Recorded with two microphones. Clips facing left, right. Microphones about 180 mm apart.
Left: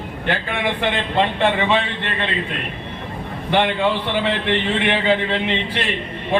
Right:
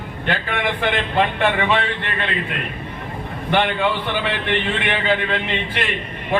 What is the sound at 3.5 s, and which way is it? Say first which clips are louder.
Speech: left 1 dB; 20° left (ahead or behind).